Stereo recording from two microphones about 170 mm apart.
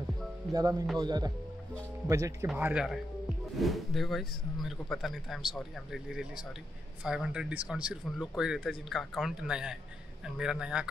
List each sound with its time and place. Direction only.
0.5 s speech: 20° right (ahead or behind)
2.4 s speech: 5° right (ahead or behind)